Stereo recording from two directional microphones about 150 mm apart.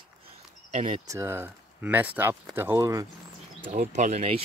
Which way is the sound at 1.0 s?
20° right (ahead or behind).